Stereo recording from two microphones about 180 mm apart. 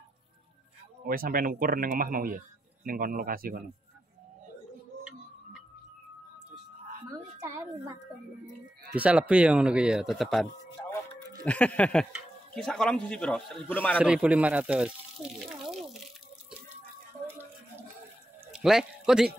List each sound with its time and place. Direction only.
1.0 s speech: 50° right (ahead or behind)
7.3 s a sound: 15° right (ahead or behind)
8.9 s speech: 10° right (ahead or behind)
11.4 s a sound: 5° left (ahead or behind)
12.5 s speech: 5° left (ahead or behind)
13.9 s speech: 5° right (ahead or behind)
15.3 s water: centre (ahead or behind)
17.3 s a sound: 10° right (ahead or behind)
18.5 s speech: 5° right (ahead or behind)